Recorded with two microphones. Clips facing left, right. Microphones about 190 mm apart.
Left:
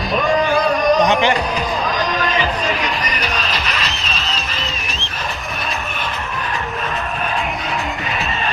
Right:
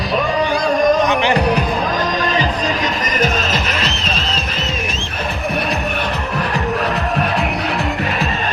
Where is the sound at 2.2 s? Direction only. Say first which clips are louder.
Right 1 dB; 40° right (ahead or behind).